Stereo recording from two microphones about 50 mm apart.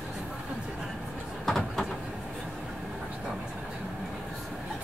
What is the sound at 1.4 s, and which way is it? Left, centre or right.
Vehicle, centre.